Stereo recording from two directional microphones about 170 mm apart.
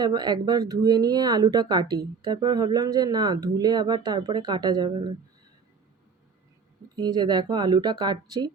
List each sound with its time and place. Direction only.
0.0 s speech: 25° right (ahead or behind)
6.9 s speech: 25° right (ahead or behind)